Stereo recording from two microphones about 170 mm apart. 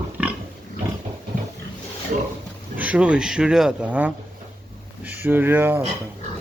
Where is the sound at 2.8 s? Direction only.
5° right (ahead or behind).